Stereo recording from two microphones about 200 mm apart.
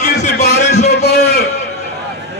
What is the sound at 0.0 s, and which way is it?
Music, 35° left (ahead or behind).